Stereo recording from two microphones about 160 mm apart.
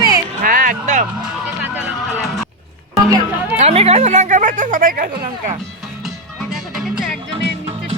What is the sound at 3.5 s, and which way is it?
Speech, 40° right (ahead or behind).